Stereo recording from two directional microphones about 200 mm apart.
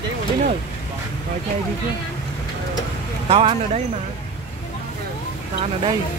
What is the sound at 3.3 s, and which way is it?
Speech, 30° right (ahead or behind).